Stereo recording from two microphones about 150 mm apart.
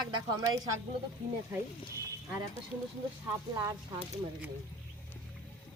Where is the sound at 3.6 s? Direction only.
25° right (ahead or behind).